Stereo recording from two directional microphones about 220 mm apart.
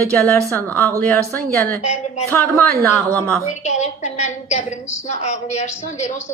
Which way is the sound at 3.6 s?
30° left (ahead or behind).